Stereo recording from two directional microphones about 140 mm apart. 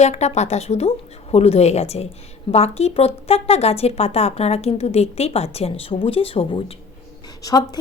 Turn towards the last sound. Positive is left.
turn(degrees=25)  # may be behind; listen again after turning